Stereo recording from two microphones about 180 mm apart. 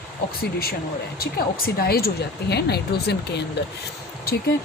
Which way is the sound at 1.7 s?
60° left (ahead or behind).